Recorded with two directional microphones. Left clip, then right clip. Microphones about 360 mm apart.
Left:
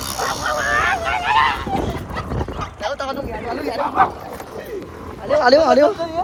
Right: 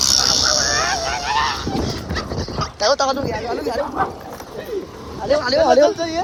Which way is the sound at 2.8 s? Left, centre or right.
Centre.